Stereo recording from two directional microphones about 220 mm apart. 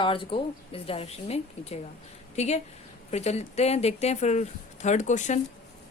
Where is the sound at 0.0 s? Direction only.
25° left (ahead or behind).